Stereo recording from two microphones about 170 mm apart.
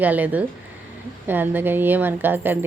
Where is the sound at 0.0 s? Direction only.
10° right (ahead or behind).